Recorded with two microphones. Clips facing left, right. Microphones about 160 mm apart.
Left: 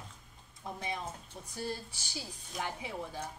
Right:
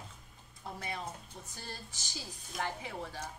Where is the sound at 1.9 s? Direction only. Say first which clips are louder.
Left 2 dB; 10° left (ahead or behind).